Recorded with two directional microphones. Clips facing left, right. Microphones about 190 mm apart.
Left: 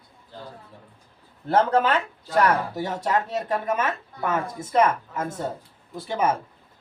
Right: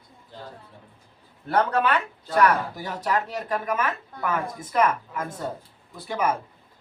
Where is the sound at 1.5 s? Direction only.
25° left (ahead or behind).